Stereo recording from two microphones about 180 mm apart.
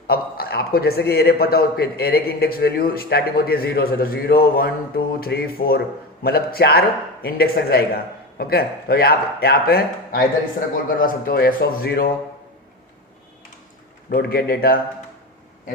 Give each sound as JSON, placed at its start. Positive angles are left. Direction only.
{"t": 0.1, "sound": "a man's voice", "side_deg": 60}
{"t": 14.1, "sound": "a man's voice", "side_deg": 60}